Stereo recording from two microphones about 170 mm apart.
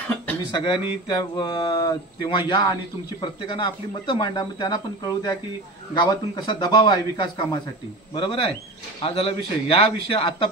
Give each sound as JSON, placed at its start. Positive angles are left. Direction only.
{"t": 0.5, "sound": "a man's voice", "side_deg": 25}